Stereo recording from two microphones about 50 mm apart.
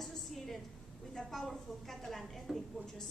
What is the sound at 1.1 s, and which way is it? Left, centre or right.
A woman's voice, centre.